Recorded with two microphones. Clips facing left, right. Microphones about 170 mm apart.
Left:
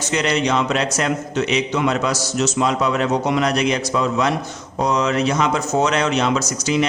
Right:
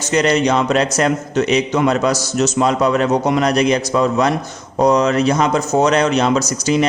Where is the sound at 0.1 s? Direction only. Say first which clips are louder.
Right 5 dB; 40° right (ahead or behind).